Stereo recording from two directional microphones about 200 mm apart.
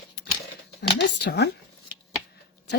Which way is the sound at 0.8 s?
55° left (ahead or behind).